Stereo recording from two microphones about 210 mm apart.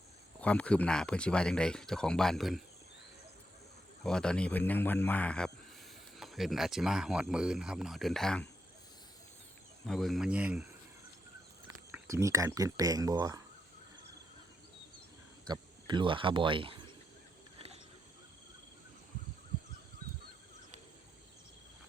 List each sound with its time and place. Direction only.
0.4 s speech: 5° left (ahead or behind)
4.0 s a man's voice: 5° left (ahead or behind)
9.8 s speech: centre (ahead or behind)
11.9 s speech: 15° right (ahead or behind)
15.4 s speech: 20° right (ahead or behind)